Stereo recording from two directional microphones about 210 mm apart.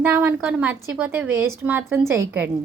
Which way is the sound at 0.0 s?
10° right (ahead or behind).